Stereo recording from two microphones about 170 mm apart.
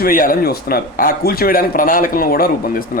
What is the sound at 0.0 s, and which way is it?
Speech, 55° left (ahead or behind).